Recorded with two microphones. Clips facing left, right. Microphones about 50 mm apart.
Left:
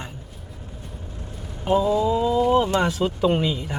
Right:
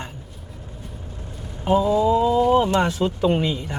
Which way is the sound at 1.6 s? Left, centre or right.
Centre.